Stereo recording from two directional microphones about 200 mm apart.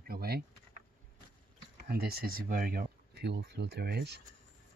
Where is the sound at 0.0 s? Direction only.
50° right (ahead or behind).